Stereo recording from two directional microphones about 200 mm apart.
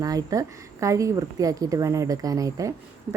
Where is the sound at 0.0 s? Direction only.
20° right (ahead or behind).